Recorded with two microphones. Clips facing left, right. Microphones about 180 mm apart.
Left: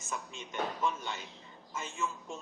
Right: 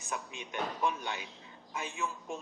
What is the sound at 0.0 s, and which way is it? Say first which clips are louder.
Speech: right 1 dB; 15° right (ahead or behind).